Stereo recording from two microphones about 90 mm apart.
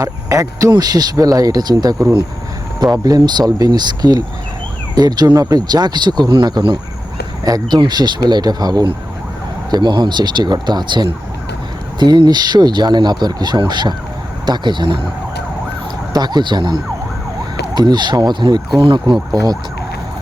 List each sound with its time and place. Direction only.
0.0 s speech: 40° right (ahead or behind); by 15.0 s 65° right (ahead or behind)
16.1 s speech: 50° right (ahead or behind)
19.3 s speech: 45° right (ahead or behind)